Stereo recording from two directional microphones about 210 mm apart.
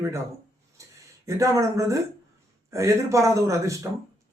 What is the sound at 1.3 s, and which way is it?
Speech, 15° right (ahead or behind).